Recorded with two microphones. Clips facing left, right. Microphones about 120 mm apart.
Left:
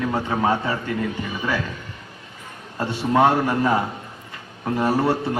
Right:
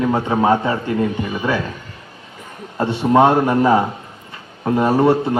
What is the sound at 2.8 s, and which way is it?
Speech, 20° right (ahead or behind).